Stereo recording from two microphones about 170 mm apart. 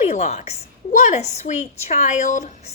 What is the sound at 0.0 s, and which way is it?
A woman's voice, 40° left (ahead or behind).